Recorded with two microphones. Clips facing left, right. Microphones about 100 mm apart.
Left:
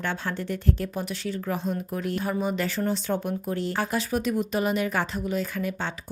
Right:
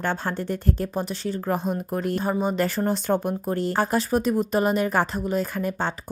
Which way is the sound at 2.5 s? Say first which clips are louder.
Right 3 dB; 45° right (ahead or behind).